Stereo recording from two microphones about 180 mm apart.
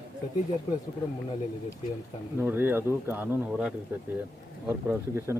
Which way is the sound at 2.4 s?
10° right (ahead or behind).